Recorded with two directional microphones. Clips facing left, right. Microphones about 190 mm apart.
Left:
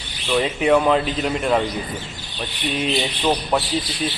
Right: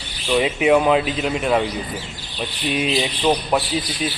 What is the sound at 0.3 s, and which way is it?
Speech, 15° right (ahead or behind).